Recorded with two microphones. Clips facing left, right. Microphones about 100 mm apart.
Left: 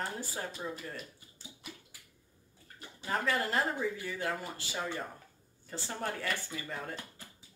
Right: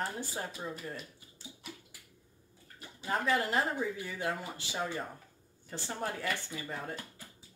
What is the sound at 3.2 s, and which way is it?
Speech, 15° right (ahead or behind).